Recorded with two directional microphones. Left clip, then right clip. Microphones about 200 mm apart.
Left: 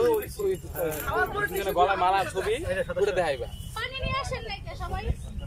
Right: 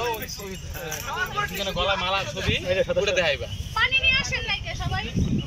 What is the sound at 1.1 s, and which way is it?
Speech, 55° left (ahead or behind).